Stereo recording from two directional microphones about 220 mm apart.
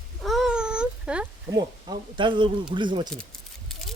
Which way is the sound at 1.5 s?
20° right (ahead or behind).